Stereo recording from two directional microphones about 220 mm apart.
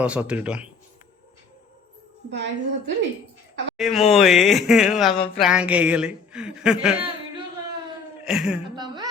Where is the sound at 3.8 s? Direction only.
Centre (ahead or behind).